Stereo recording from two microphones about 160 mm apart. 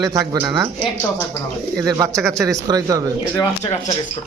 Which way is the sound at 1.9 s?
20° right (ahead or behind).